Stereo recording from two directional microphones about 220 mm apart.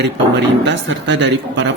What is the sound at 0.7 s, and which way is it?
Speech, 55° right (ahead or behind).